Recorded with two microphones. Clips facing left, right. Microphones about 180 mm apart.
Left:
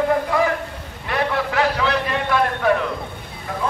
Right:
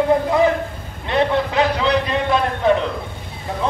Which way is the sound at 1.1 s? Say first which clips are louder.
Right 4 dB; 20° right (ahead or behind).